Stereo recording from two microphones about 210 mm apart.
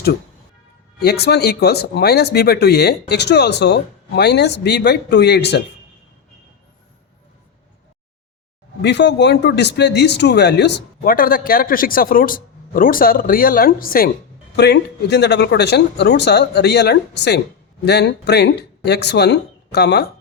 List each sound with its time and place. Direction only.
0.9 s speech: 50° left (ahead or behind)
8.8 s speech: 55° left (ahead or behind)